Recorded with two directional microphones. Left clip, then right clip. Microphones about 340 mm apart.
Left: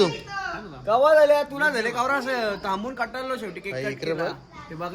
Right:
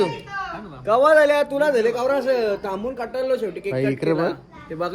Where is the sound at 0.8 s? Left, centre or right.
Right.